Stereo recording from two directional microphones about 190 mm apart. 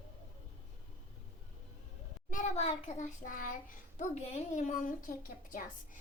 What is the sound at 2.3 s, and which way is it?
A child's voice, 40° left (ahead or behind).